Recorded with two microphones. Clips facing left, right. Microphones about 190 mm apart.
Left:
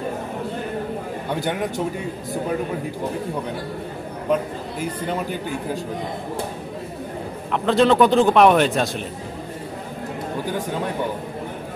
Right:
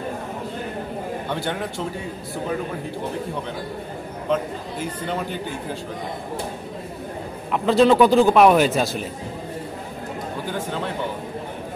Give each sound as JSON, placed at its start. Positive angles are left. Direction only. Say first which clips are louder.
{"t": 7.5, "sound": "a man's voice", "louder": "right 1 dB", "side_deg": 0}